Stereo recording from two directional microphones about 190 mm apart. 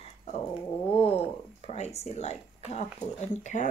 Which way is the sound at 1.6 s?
35° left (ahead or behind).